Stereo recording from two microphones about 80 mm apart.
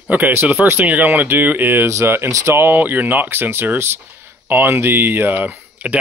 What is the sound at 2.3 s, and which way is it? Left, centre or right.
Speech, right.